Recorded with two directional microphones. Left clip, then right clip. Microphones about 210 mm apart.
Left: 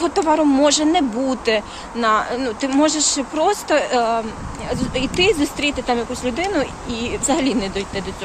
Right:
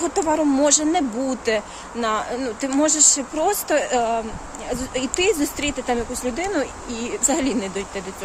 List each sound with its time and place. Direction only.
0.0 s speech: 15° right (ahead or behind)